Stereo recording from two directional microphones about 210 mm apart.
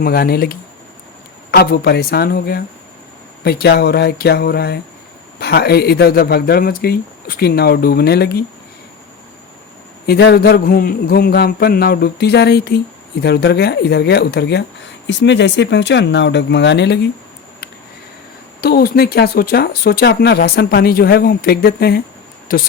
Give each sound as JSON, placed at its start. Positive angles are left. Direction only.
{"t": 0.0, "sound": "speech", "side_deg": 45}
{"t": 10.1, "sound": "speech", "side_deg": 50}
{"t": 18.6, "sound": "speech", "side_deg": 50}